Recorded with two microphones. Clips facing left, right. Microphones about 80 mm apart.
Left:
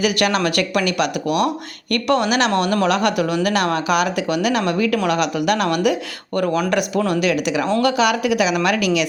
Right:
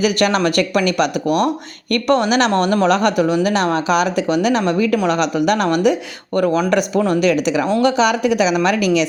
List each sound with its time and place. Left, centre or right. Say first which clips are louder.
0.0 s speech: right 3 dB; right